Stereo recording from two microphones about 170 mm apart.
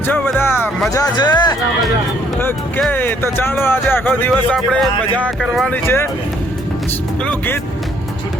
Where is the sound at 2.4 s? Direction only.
10° left (ahead or behind).